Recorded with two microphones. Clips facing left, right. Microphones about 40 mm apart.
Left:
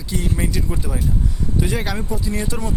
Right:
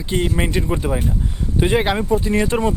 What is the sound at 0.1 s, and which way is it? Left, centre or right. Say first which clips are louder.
Speech: right 4 dB; right.